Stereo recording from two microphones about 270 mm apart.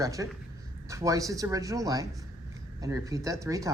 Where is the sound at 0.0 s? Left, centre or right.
Centre.